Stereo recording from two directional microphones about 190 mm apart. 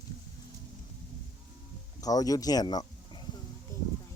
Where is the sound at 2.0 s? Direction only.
20° left (ahead or behind).